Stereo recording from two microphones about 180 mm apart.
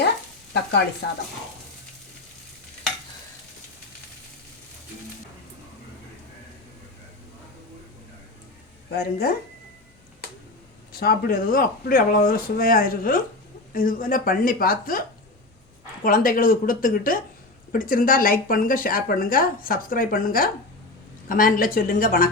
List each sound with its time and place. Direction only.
1.0 s speech: 75° left (ahead or behind)
8.9 s speech: 60° left (ahead or behind)
10.9 s speech: 55° left (ahead or behind)
16.0 s speech: 50° left (ahead or behind)